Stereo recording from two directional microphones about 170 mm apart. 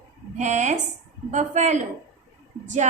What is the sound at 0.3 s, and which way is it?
A woman's voice, 45° right (ahead or behind).